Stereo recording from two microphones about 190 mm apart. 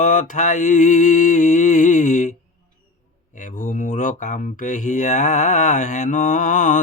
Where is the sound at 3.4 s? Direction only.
40° left (ahead or behind).